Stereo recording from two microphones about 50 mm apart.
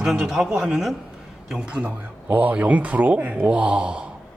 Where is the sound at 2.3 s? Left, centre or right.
Right.